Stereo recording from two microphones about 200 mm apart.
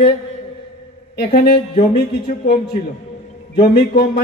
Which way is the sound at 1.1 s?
50° left (ahead or behind).